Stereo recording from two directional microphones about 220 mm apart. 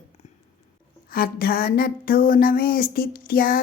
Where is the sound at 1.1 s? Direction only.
40° left (ahead or behind).